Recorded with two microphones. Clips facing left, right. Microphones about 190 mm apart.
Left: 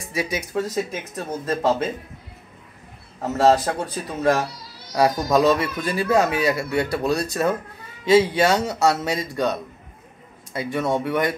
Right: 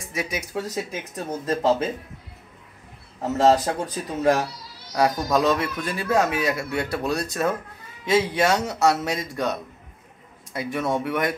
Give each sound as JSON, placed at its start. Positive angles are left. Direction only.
{"t": 0.1, "sound": "speech", "side_deg": 0}
{"t": 3.3, "sound": "speech", "side_deg": -15}
{"t": 4.9, "sound": "speech", "side_deg": 5}